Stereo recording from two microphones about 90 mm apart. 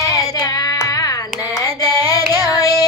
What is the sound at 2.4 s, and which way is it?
Child singing, 45° left (ahead or behind).